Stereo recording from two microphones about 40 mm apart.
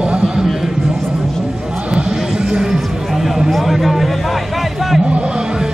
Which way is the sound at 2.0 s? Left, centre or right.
Centre.